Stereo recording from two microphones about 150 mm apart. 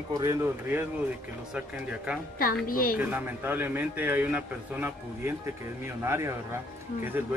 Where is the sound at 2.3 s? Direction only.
70° left (ahead or behind).